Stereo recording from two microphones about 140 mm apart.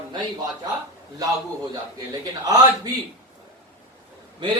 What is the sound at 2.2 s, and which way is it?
Speech, 30° right (ahead or behind).